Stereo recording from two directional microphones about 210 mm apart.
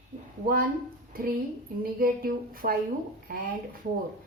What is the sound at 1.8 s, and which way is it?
A woman's voice, 45° right (ahead or behind).